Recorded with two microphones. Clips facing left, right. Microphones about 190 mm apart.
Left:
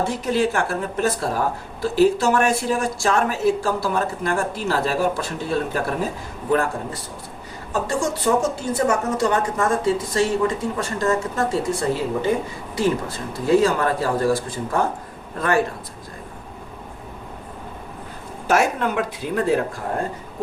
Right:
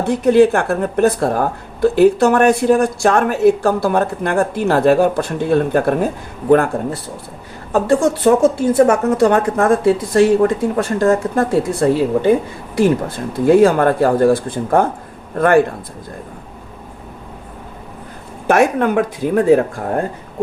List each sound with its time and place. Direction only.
0.3 s a woman's voice: 60° right (ahead or behind)
18.4 s a woman's voice: 60° right (ahead or behind)